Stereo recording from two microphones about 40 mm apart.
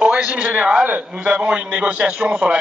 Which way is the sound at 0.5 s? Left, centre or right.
Right.